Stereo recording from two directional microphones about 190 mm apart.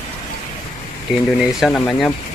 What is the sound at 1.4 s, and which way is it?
Speech, centre (ahead or behind).